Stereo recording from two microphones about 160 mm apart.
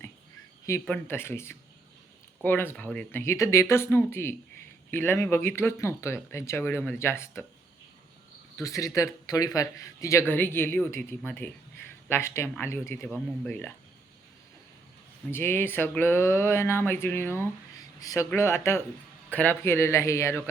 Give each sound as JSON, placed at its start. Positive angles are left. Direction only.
{"t": 0.9, "sound": "speech", "side_deg": 15}
{"t": 8.5, "sound": "speech", "side_deg": 20}
{"t": 13.0, "sound": "speech", "side_deg": -5}
{"t": 13.5, "sound": "speech", "side_deg": 10}
{"t": 15.3, "sound": "speech", "side_deg": 15}